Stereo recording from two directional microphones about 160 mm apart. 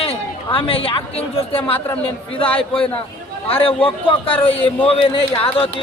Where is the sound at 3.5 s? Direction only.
35° left (ahead or behind).